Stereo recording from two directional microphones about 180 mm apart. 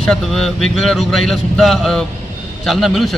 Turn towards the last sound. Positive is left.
turn(degrees=0)  # may be behind; listen again after turning